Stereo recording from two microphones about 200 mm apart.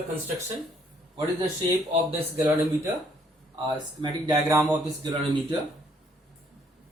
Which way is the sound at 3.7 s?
20° right (ahead or behind).